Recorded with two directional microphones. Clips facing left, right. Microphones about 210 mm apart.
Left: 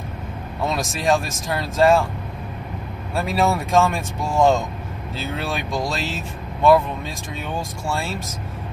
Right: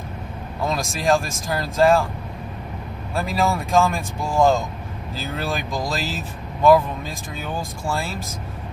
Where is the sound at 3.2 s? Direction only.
Centre (ahead or behind).